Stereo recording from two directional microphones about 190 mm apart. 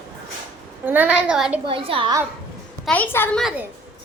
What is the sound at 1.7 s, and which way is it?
Speech, 30° right (ahead or behind).